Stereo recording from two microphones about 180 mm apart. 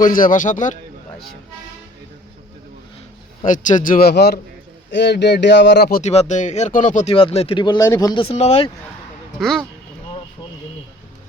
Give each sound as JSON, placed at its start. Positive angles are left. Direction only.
{"t": 0.0, "sound": "speech", "side_deg": 50}
{"t": 3.4, "sound": "speech", "side_deg": 45}
{"t": 6.0, "sound": "speech", "side_deg": 40}
{"t": 7.1, "sound": "speech", "side_deg": 30}
{"t": 9.4, "sound": "speech", "side_deg": 0}